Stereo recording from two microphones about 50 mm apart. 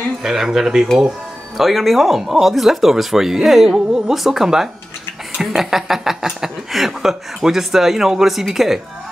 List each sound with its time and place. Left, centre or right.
0.2 s speech: centre